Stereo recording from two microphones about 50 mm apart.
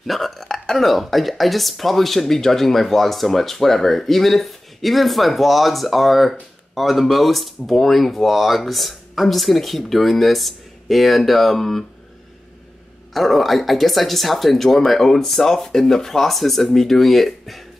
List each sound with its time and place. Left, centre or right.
0.0 s speech: centre
13.1 s speech: centre